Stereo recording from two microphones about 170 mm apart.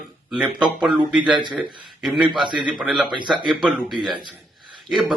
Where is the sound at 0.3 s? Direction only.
5° right (ahead or behind).